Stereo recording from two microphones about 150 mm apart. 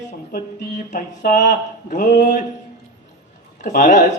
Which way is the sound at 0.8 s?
60° left (ahead or behind).